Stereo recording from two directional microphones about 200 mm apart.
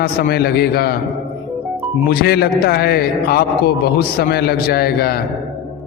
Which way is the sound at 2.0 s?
50° left (ahead or behind).